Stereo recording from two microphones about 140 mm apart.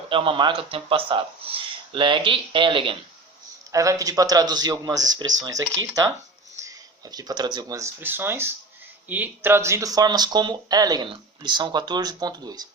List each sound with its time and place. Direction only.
0.1 s speech: 35° right (ahead or behind)
3.7 s speech: 25° right (ahead or behind)